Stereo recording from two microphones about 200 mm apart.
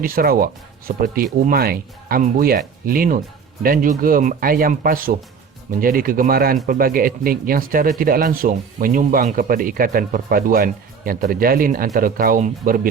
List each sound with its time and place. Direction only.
0.0 s speech: 45° right (ahead or behind)